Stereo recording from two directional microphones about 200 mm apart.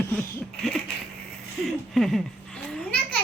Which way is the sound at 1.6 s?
Centre (ahead or behind).